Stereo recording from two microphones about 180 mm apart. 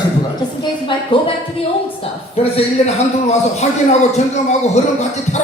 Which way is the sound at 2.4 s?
35° left (ahead or behind).